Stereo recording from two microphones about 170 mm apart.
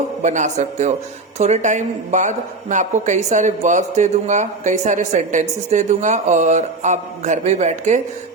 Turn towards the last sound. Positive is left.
turn(degrees=-45)  # may be behind; listen again after turning